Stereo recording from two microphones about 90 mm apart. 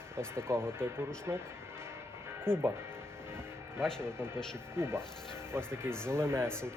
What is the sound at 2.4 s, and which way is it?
Speech, 25° right (ahead or behind).